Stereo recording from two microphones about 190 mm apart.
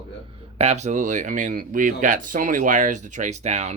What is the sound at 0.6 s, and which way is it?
Speech, 35° right (ahead or behind).